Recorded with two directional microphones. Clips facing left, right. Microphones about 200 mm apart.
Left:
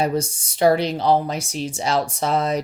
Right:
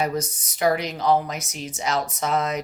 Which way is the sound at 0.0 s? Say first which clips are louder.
Left 4 dB; 30° left (ahead or behind).